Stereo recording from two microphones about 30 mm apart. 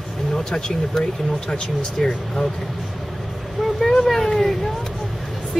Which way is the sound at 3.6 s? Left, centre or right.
Centre.